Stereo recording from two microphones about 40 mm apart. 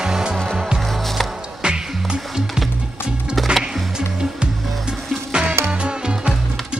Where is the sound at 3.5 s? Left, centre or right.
Centre.